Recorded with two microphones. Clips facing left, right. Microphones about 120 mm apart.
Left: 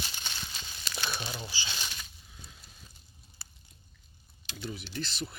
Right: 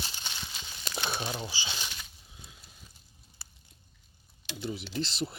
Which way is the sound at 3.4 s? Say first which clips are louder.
Even; 10° right (ahead or behind).